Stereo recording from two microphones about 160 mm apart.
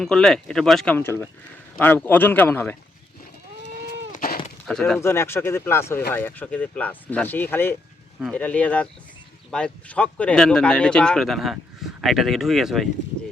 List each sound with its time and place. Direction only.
0.0 s speech: 5° left (ahead or behind)
4.1 s goat: 65° left (ahead or behind)
4.6 s speech: 5° left (ahead or behind)
4.9 s speech: 15° left (ahead or behind); by 12.9 s centre (ahead or behind)